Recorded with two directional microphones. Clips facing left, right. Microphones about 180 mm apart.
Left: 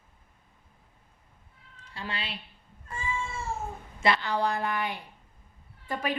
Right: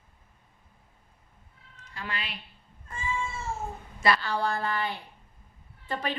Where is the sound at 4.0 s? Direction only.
20° left (ahead or behind).